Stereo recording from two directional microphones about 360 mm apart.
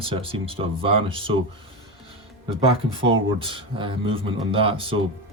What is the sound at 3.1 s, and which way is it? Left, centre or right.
Speech, centre.